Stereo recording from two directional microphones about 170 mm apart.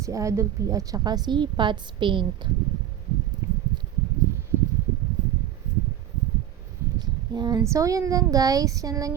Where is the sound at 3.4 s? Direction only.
15° right (ahead or behind).